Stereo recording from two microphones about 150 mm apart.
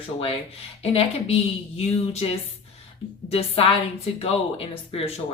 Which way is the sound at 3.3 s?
40° left (ahead or behind).